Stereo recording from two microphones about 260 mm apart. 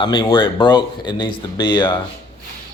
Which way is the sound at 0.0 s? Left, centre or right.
Centre.